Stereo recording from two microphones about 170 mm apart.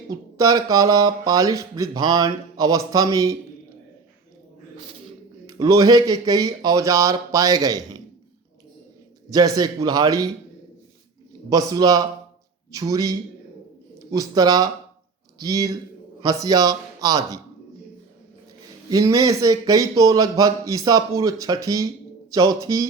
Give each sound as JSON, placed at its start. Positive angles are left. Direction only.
{"t": 0.1, "sound": "speech", "side_deg": -20}
{"t": 5.5, "sound": "speech", "side_deg": -20}
{"t": 9.3, "sound": "speech", "side_deg": -20}
{"t": 11.4, "sound": "speech", "side_deg": -20}
{"t": 14.1, "sound": "speech", "side_deg": -20}
{"t": 18.9, "sound": "speech", "side_deg": -20}